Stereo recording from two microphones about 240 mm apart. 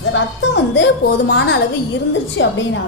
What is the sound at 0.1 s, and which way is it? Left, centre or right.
A woman's voice, left.